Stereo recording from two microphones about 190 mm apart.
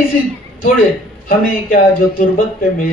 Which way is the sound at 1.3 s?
45° left (ahead or behind).